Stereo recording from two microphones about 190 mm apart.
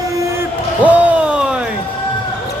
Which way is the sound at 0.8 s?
10° right (ahead or behind).